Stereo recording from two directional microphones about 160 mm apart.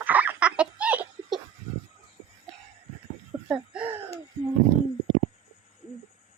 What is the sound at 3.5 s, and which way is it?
Speech, 10° right (ahead or behind).